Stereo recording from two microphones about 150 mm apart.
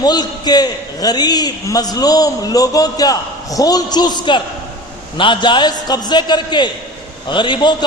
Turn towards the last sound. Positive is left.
turn(degrees=30)  # may be behind; listen again after turning